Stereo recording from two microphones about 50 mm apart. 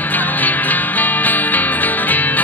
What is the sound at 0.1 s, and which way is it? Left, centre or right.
Music, left.